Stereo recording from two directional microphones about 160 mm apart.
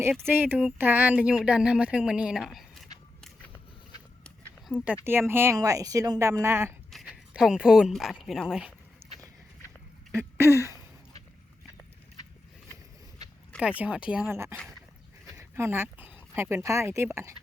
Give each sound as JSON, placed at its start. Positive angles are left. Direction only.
{"t": 0.3, "sound": "speech", "side_deg": -10}
{"t": 3.2, "sound": "a sound", "side_deg": 5}
{"t": 4.7, "sound": "speech", "side_deg": 10}
{"t": 5.0, "sound": "speech", "side_deg": -15}
{"t": 6.9, "sound": "speech", "side_deg": 0}
{"t": 9.0, "sound": "horse", "side_deg": -15}
{"t": 10.1, "sound": "a sound", "side_deg": -15}
{"t": 13.6, "sound": "speech", "side_deg": -10}
{"t": 15.4, "sound": "speech", "side_deg": -15}